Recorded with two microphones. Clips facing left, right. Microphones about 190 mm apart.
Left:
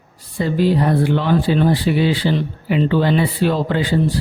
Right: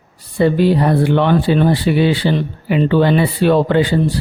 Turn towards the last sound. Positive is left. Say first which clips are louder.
# right 5 dB
turn(degrees=-65)  # may be behind; listen again after turning